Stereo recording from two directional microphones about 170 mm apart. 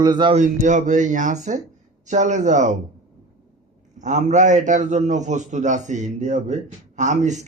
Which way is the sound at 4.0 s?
45° right (ahead or behind).